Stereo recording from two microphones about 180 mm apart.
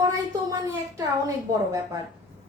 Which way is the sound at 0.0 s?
20° right (ahead or behind).